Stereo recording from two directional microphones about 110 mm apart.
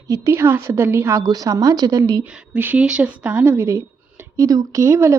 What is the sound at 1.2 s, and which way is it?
Speech, 35° right (ahead or behind).